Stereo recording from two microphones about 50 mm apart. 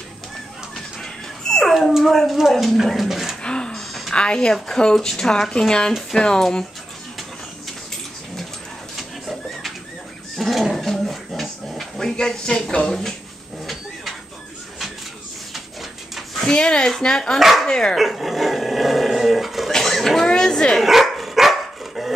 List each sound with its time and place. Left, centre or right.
1.7 s speech: centre
3.4 s a sound: centre
4.1 s speech: centre
8.9 s a sound: centre
12.2 s speech: centre
16.2 s a sound: centre
16.5 s speech: centre
17.4 s speech: centre
17.6 s speech: centre
17.9 s dog: centre
19.7 s a sound: centre
20.8 s dog: centre